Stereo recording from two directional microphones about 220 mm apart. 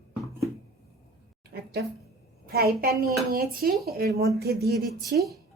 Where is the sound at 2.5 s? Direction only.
45° right (ahead or behind).